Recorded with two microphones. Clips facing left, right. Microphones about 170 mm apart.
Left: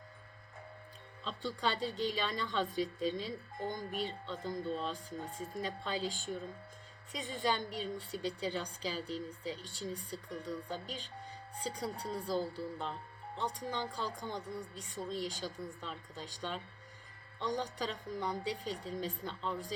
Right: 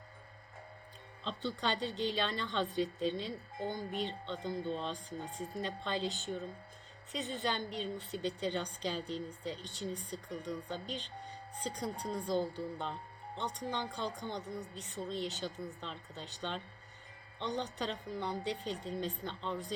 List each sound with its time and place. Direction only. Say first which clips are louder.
1.4 s a woman's voice: even; 10° left (ahead or behind)